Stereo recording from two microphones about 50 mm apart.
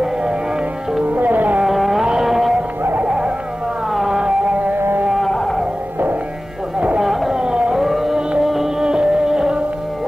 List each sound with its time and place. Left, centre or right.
0.0 s music: centre
1.1 s music: right
1.6 s carnatic music: centre
2.0 s music: centre
2.8 s music: right
3.1 s dog: centre
3.9 s music: centre
4.2 s music: centre
4.7 s a sound: right
5.2 s music: centre
7.0 s a sound: centre
7.7 s a sound: centre
8.4 s music: centre